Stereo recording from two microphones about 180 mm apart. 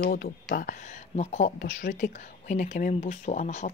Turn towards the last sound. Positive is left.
turn(degrees=45)  # may be behind; listen again after turning